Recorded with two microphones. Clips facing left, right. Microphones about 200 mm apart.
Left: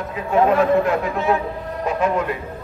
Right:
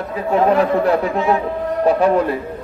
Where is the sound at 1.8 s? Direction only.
35° right (ahead or behind).